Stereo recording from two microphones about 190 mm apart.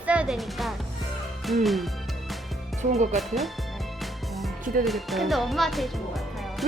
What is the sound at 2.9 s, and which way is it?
Speech, 35° right (ahead or behind).